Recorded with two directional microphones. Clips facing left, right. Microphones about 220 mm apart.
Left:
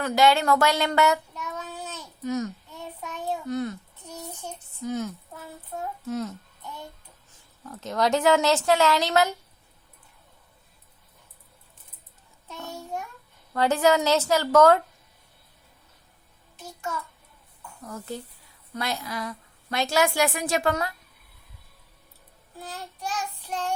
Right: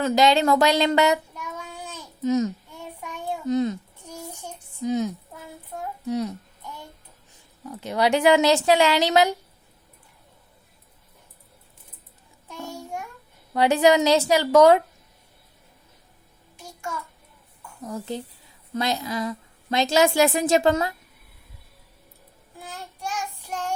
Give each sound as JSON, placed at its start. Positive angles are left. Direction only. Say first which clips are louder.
{"t": 0.0, "sound": "child singing", "louder": "right 2 dB", "side_deg": -20}
{"t": 4.8, "sound": "a sound", "louder": "right 5 dB", "side_deg": -20}
{"t": 6.1, "sound": "speech", "louder": "right 4 dB", "side_deg": -15}
{"t": 7.6, "sound": "speech", "louder": "right 2 dB", "side_deg": -10}
{"t": 12.5, "sound": "child singing", "louder": "right 1 dB", "side_deg": -10}
{"t": 13.5, "sound": "speech", "louder": "right 3 dB", "side_deg": -15}
{"t": 17.8, "sound": "a woman's voice", "louder": "right 5 dB", "side_deg": -20}
{"t": 22.6, "sound": "child singing", "louder": "even", "side_deg": -10}